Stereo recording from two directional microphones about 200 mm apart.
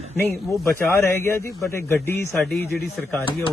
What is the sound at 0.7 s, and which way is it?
A man's voice, 10° left (ahead or behind).